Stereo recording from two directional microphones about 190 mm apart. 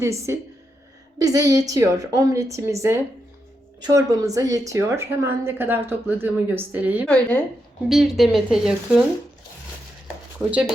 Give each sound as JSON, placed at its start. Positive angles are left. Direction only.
{"t": 0.0, "sound": "a woman's voice", "side_deg": -15}
{"t": 3.8, "sound": "a woman's voice", "side_deg": -20}
{"t": 7.1, "sound": "a woman's voice", "side_deg": 5}
{"t": 10.3, "sound": "speech", "side_deg": -5}